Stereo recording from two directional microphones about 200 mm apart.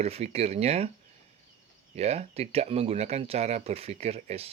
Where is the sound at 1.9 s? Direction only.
30° right (ahead or behind).